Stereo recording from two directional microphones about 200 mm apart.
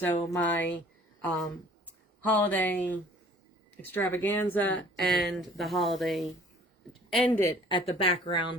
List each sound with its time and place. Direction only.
0.0 s speech: 10° left (ahead or behind)
2.2 s speech: 10° left (ahead or behind)
7.7 s speech: 30° left (ahead or behind)